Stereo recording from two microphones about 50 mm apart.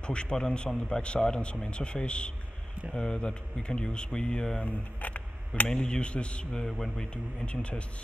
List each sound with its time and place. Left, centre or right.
0.0 s a man's voice: centre
4.6 s camera: left
5.7 s a man's voice: centre